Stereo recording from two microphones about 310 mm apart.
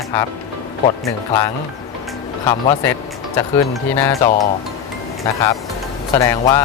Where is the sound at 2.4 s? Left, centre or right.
Centre.